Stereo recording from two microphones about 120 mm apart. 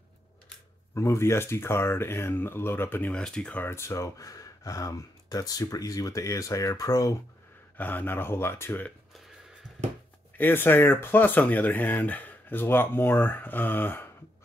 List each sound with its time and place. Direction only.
0.9 s speech: 25° left (ahead or behind)
7.7 s speech: 15° left (ahead or behind)
10.3 s speech: 15° left (ahead or behind)